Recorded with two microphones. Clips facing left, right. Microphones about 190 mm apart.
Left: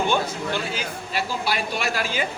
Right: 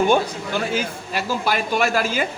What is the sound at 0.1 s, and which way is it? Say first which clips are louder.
A man's voice: right 4 dB; 50° right (ahead or behind).